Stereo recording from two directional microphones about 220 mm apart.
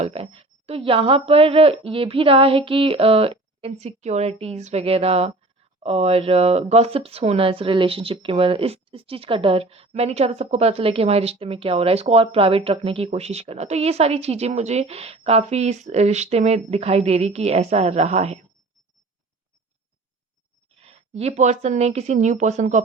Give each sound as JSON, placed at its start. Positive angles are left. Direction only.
{"t": 0.0, "sound": "speech", "side_deg": -25}
{"t": 20.7, "sound": "speech", "side_deg": -25}